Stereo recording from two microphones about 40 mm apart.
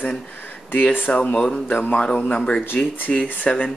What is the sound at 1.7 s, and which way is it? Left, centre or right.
Speech, left.